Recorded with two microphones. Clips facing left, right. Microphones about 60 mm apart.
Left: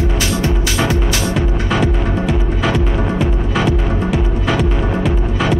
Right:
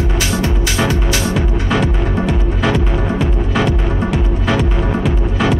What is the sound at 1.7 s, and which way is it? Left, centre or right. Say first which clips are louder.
Music: even; centre.